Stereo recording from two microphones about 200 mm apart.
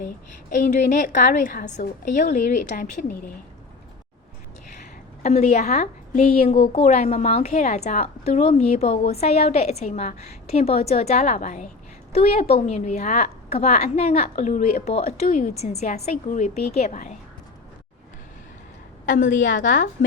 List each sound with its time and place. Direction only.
0.7 s a woman's voice: 40° left (ahead or behind)
1.8 s a woman's voice: 50° left (ahead or behind)
5.2 s a woman's voice: 35° left (ahead or behind)
19.0 s a woman's voice: 40° left (ahead or behind)